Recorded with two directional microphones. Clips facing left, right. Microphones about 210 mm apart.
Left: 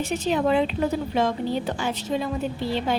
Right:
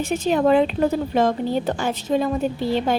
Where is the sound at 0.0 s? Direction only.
50° right (ahead or behind).